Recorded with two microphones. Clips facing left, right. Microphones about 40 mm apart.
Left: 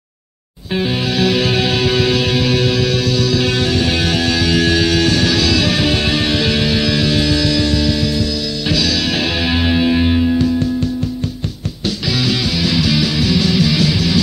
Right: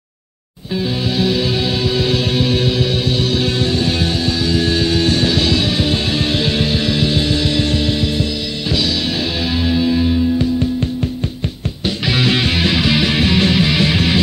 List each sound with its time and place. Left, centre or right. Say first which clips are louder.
1.3 s music: left 2 dB; left
2.9 s music: left 2 dB; right
3.3 s music: left 1 dB; left
4.4 s music: left 2 dB; left
7.4 s music: left 2 dB; right
9.7 s music: even; left
11.8 s music: right 2 dB; right